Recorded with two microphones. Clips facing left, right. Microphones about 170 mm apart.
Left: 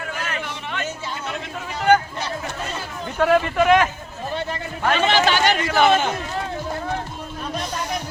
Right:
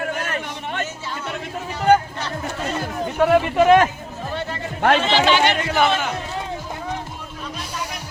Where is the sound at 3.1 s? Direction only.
10° right (ahead or behind).